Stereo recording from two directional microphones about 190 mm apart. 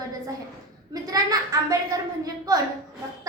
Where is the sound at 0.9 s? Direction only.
20° right (ahead or behind).